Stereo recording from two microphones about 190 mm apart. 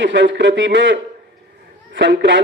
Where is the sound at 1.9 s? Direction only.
70° right (ahead or behind).